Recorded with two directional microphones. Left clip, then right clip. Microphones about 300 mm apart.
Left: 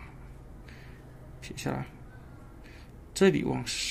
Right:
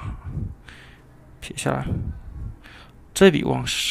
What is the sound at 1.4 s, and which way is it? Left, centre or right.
Speech, centre.